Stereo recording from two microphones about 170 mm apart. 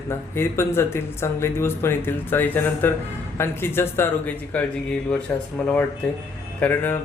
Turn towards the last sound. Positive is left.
turn(degrees=10)  # may be behind; listen again after turning